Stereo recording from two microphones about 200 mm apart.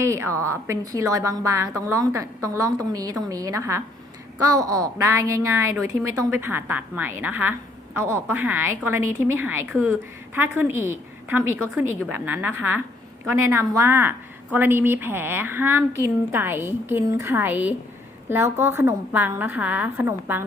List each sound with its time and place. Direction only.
0.0 s a woman's voice: 15° right (ahead or behind)